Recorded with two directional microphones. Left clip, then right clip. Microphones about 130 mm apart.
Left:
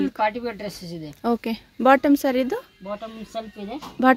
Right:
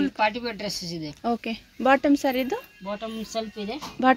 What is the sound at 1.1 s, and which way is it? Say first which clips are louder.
Speech: left 4 dB; 45° left (ahead or behind).